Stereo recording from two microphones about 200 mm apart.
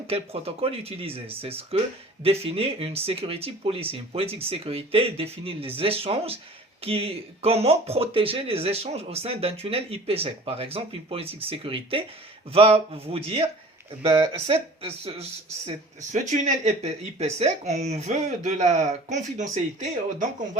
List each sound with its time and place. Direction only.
0.1 s speech: 30° right (ahead or behind)